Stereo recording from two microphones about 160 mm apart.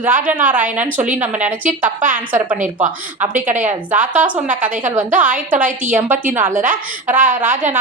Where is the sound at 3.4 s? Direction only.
50° right (ahead or behind).